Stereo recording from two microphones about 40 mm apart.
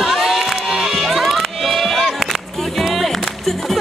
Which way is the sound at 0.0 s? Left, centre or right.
Centre.